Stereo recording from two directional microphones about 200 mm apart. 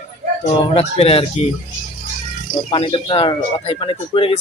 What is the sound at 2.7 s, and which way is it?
Speech, 25° left (ahead or behind).